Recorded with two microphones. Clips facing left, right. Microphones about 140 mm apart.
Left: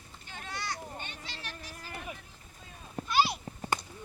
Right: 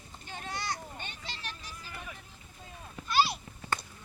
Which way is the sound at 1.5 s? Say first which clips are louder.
Left 1 dB; 55° left (ahead or behind).